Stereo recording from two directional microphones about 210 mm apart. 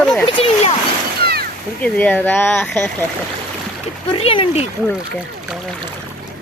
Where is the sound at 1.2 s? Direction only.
45° right (ahead or behind).